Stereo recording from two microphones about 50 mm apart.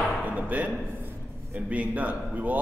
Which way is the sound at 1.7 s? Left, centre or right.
Right.